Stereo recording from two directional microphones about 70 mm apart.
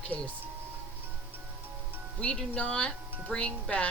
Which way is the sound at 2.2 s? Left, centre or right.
Centre.